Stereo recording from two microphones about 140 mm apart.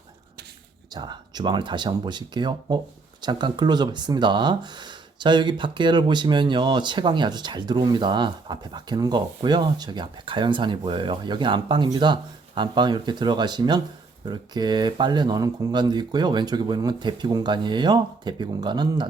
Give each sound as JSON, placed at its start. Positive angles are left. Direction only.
{"t": 0.9, "sound": "speech", "side_deg": -30}